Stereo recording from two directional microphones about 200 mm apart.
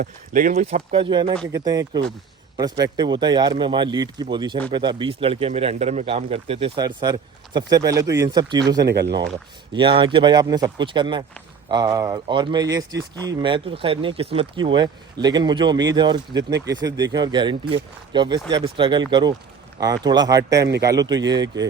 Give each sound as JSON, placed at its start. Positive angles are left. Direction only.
{"t": 0.0, "sound": "a man's voice", "side_deg": -40}
{"t": 8.8, "sound": "speech", "side_deg": -55}
{"t": 9.7, "sound": "a man's voice", "side_deg": -25}